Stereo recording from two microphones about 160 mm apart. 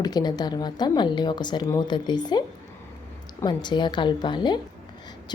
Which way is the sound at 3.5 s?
30° left (ahead or behind).